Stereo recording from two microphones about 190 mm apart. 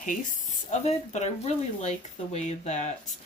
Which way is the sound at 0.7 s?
35° left (ahead or behind).